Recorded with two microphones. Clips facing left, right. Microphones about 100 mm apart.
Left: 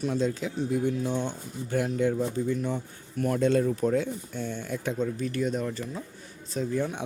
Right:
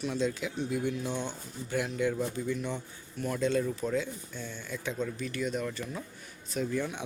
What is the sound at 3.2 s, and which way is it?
Speech, 50° left (ahead or behind).